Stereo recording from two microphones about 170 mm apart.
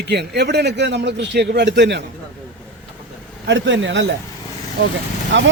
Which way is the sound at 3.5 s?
90° right.